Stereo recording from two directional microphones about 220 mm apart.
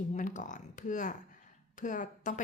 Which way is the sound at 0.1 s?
35° left (ahead or behind).